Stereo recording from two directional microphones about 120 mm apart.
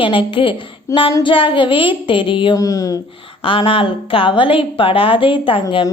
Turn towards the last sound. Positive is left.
turn(degrees=45)  # may be behind; listen again after turning